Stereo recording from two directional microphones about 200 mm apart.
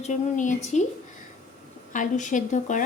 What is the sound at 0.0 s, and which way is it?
Speech, 40° left (ahead or behind).